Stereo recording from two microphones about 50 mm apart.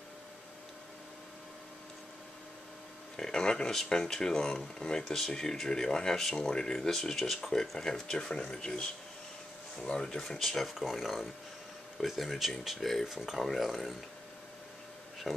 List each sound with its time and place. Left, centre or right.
3.2 s speech: centre
9.8 s speech: centre
10.2 s speech: centre
15.3 s speech: centre